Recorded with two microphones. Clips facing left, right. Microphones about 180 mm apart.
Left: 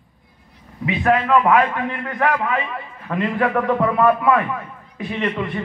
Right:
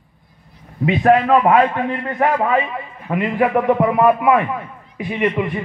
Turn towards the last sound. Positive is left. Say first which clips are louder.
# right 4 dB
turn(degrees=-15)  # may be behind; listen again after turning